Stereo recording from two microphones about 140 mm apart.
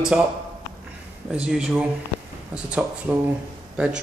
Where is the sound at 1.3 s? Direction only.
5° right (ahead or behind).